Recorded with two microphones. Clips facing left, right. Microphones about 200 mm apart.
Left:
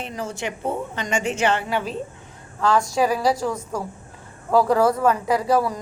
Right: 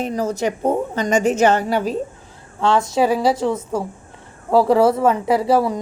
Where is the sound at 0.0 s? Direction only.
40° right (ahead or behind).